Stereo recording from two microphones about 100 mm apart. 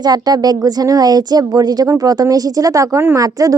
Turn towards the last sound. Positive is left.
turn(degrees=-35)  # may be behind; listen again after turning